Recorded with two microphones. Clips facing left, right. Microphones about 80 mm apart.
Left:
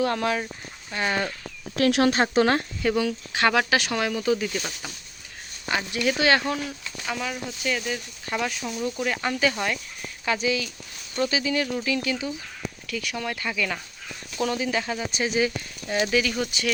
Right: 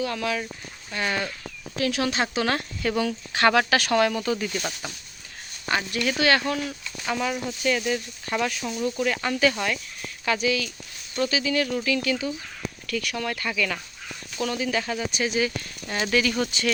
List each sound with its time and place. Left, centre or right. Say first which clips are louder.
0.0 s speech: left 3 dB; left
0.9 s speech: left 1 dB; left
1.7 s speech: left 5 dB; left
2.0 s speech: left 6 dB; left
2.9 s speech: even; centre
5.7 s speech: even; centre
7.0 s speech: right 4 dB; centre; by 15.5 s left
15.9 s speech: even; centre